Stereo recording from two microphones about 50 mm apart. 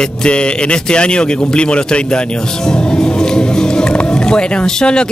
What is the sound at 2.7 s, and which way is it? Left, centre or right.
Music, centre.